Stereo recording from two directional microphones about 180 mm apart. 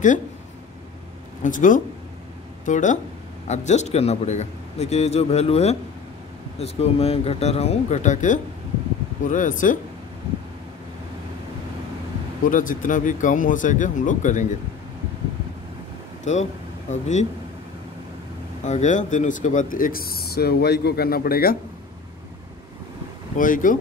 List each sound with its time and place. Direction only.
1.4 s a man's voice: 45° left (ahead or behind)
12.4 s a man's voice: 50° left (ahead or behind)
16.3 s speech: 40° left (ahead or behind)
18.6 s speech: 40° left (ahead or behind)
23.3 s a man's voice: 50° left (ahead or behind)